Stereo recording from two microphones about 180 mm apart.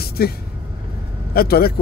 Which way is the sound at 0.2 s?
60° left (ahead or behind).